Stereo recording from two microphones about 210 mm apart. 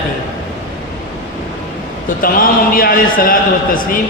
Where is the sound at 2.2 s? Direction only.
45° left (ahead or behind).